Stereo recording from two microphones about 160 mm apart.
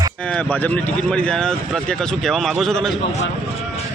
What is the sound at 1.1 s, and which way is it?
Speech, 5° left (ahead or behind).